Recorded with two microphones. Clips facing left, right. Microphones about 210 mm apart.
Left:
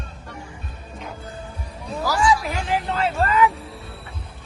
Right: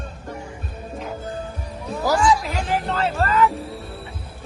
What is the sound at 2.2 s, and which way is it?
Music, centre (ahead or behind).